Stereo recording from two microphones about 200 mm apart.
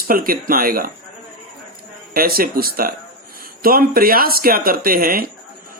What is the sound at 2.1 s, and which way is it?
Speech, 45° right (ahead or behind).